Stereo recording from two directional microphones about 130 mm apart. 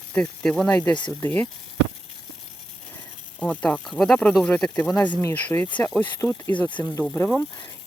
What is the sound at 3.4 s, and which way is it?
Speech, 10° left (ahead or behind).